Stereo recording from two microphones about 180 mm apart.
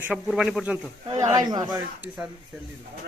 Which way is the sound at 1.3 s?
20° right (ahead or behind).